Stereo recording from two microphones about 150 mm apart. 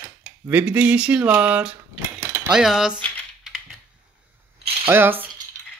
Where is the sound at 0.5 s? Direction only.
10° right (ahead or behind).